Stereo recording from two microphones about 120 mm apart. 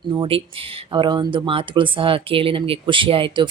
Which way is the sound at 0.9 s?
40° right (ahead or behind).